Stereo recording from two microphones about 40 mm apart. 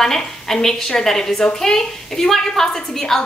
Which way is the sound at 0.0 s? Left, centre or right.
Centre.